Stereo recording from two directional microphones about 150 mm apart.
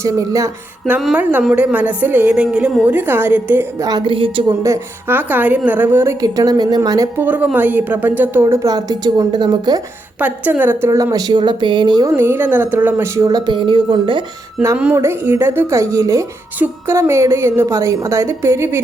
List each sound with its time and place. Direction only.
0.0 s a woman's voice: 20° right (ahead or behind)
0.9 s speech: 10° right (ahead or behind)
3.8 s a woman's voice: 30° right (ahead or behind)
4.6 s a woman's voice: 15° right (ahead or behind)
7.3 s speech: 10° right (ahead or behind); by 9.8 s 25° right (ahead or behind)
10.2 s a woman's voice: 10° right (ahead or behind); by 12.1 s 30° right (ahead or behind)
12.1 s a woman's voice: 15° right (ahead or behind); by 14.3 s 35° right (ahead or behind)
14.8 s speech: 15° right (ahead or behind)